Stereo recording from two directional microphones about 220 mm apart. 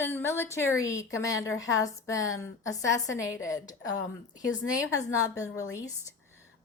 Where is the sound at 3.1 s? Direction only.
60° left (ahead or behind).